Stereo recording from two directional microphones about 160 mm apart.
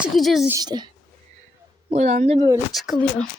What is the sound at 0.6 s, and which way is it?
Speech, 25° right (ahead or behind).